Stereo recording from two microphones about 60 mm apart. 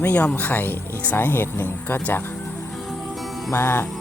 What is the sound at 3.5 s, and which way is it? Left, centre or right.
Music, left.